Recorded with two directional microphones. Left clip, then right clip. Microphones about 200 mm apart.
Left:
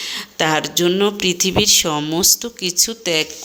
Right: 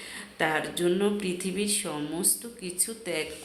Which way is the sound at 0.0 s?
45° left (ahead or behind).